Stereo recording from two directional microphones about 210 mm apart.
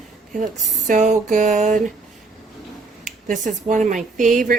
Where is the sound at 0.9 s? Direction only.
35° right (ahead or behind).